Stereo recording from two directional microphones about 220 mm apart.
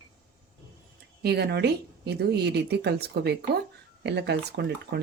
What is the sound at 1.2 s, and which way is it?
Speech, 45° right (ahead or behind).